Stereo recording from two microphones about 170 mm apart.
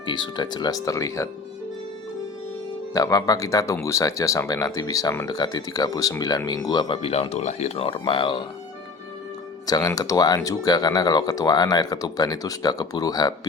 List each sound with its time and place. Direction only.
0.0 s speech: 25° left (ahead or behind)
2.9 s speech: 20° left (ahead or behind)
9.6 s speech: 20° left (ahead or behind)